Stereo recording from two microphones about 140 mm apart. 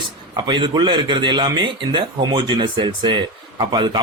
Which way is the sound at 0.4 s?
35° right (ahead or behind).